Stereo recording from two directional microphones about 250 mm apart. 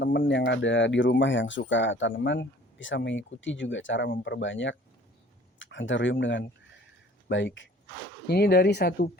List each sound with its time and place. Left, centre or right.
0.0 s speech: left